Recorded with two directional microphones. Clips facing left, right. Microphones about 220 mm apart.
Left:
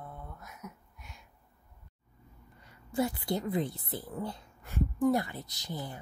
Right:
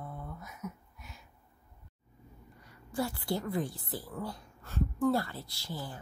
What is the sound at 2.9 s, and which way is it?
Speech, 20° left (ahead or behind).